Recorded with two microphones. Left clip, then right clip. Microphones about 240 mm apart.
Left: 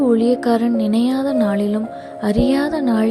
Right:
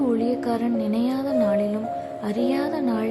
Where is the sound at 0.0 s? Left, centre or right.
Left.